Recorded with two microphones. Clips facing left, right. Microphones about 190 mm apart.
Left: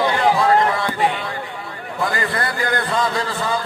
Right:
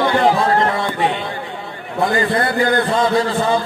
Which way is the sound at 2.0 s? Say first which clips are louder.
Right 6 dB; 25° right (ahead or behind).